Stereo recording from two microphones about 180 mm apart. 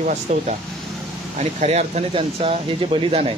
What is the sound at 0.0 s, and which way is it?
Speech, 40° right (ahead or behind).